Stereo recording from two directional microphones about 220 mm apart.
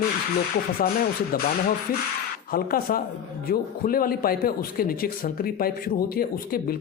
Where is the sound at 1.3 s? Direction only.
45° left (ahead or behind).